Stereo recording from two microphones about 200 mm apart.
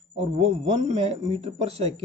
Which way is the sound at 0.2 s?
30° right (ahead or behind).